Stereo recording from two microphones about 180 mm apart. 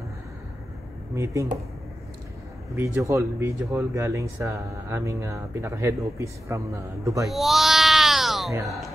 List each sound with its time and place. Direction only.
1.1 s speech: 15° right (ahead or behind)
2.7 s speech: 15° right (ahead or behind)
7.2 s cat: centre (ahead or behind)